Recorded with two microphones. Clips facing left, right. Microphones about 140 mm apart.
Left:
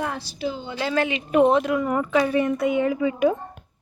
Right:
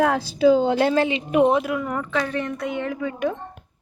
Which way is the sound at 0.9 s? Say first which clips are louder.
Right 3 dB; 25° right (ahead or behind).